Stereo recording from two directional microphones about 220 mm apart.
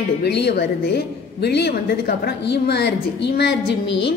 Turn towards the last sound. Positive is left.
turn(degrees=50)  # may be behind; listen again after turning